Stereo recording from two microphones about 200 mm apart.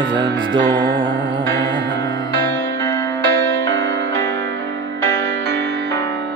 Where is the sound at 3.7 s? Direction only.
65° right (ahead or behind).